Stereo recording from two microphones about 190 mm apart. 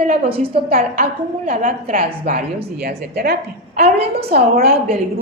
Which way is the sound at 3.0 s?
60° right (ahead or behind).